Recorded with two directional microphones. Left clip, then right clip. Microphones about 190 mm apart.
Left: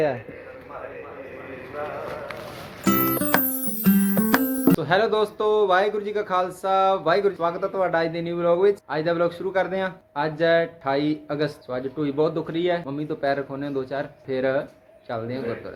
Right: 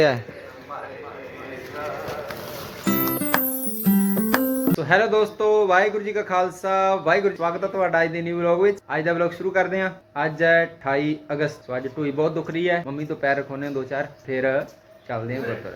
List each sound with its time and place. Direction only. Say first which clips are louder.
2.8 s music: left 2 dB; centre (ahead or behind)
8.9 s a man's voice: right 1 dB; 10° left (ahead or behind)